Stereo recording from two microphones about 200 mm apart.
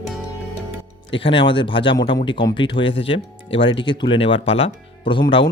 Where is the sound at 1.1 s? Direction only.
25° left (ahead or behind).